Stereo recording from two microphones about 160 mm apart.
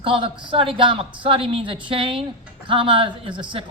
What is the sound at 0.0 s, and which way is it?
A woman's voice, 30° right (ahead or behind).